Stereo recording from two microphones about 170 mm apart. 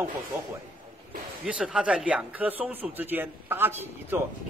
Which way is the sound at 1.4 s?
5° right (ahead or behind).